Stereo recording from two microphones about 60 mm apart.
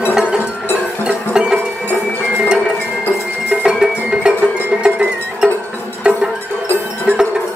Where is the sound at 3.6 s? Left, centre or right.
Centre.